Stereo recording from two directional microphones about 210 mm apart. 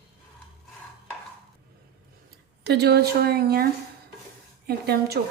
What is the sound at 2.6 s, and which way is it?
A woman's voice, 50° right (ahead or behind).